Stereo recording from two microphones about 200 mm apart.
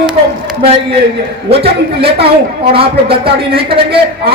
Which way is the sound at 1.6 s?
30° right (ahead or behind).